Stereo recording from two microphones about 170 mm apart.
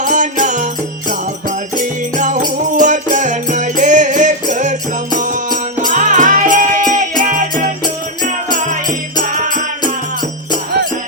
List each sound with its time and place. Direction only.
0.0 s music: 50° right (ahead or behind)